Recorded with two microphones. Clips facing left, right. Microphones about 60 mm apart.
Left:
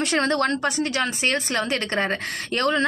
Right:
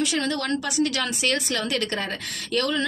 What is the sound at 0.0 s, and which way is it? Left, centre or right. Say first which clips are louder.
A woman's voice: left 4 dB; left.